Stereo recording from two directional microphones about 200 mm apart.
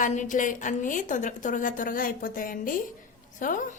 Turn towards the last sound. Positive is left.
turn(degrees=40)  # may be behind; listen again after turning